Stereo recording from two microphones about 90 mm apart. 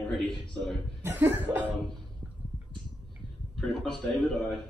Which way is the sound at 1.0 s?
25° right (ahead or behind).